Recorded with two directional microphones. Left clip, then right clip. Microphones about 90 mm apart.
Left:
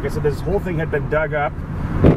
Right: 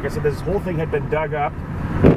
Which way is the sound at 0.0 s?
25° left (ahead or behind).